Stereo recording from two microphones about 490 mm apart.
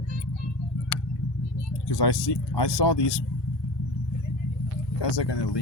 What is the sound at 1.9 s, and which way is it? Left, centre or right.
Speech, left.